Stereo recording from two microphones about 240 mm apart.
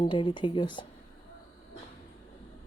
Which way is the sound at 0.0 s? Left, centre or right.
Centre.